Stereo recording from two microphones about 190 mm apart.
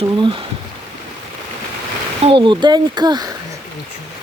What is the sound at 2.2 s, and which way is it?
Speech, 25° right (ahead or behind).